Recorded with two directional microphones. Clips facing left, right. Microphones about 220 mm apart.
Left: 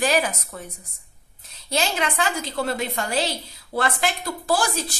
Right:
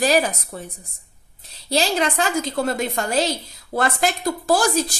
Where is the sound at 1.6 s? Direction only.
35° right (ahead or behind).